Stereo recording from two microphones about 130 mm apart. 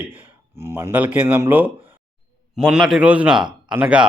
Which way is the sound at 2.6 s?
Centre (ahead or behind).